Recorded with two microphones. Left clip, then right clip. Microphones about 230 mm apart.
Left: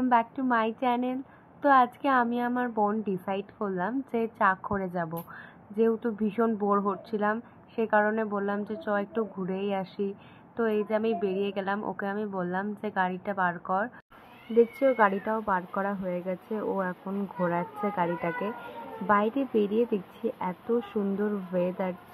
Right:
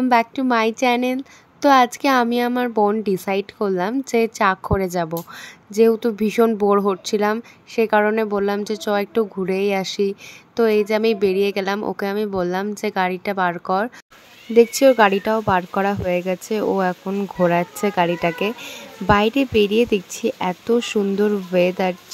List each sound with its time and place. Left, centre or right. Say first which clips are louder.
0.0 s speech: right 8 dB; right